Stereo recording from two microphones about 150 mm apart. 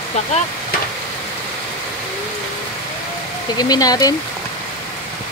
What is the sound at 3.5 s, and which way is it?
Speech, 25° left (ahead or behind).